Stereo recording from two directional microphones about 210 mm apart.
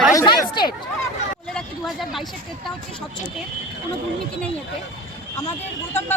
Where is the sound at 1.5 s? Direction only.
Centre (ahead or behind).